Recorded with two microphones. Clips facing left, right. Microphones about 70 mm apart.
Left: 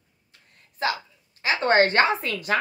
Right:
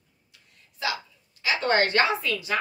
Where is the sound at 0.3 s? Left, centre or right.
Left.